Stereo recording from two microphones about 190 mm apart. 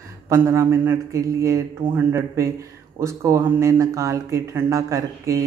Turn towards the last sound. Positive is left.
turn(degrees=-15)  # may be behind; listen again after turning